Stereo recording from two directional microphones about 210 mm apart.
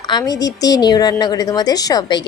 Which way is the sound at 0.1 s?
20° left (ahead or behind).